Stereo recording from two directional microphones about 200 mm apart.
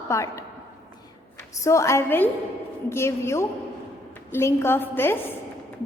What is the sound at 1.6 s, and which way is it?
A woman's voice, 15° left (ahead or behind).